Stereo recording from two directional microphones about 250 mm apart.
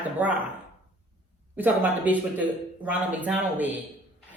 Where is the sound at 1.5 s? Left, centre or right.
Centre.